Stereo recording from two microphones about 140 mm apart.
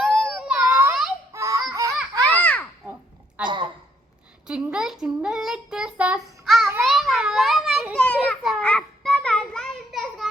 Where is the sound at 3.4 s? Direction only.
35° right (ahead or behind).